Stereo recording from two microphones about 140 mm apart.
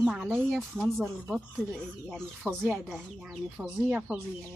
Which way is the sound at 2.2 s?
10° right (ahead or behind).